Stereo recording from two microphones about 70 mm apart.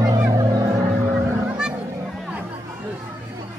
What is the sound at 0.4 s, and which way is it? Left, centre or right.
Music, right.